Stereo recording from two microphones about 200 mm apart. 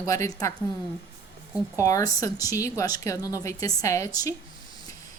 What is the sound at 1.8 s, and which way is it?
A woman's voice, 15° left (ahead or behind).